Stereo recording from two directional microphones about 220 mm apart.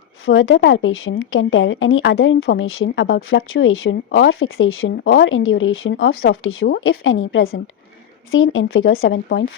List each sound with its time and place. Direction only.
0.3 s a woman's voice: 60° left (ahead or behind)